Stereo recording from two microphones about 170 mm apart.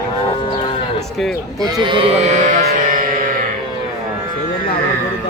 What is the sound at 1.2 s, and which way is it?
Speech, centre (ahead or behind).